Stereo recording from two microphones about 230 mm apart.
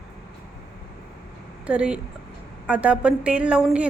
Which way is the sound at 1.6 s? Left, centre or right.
Centre.